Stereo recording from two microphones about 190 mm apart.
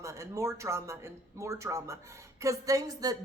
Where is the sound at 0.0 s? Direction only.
15° right (ahead or behind).